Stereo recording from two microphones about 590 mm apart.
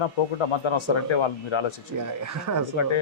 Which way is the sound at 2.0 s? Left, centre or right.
Right.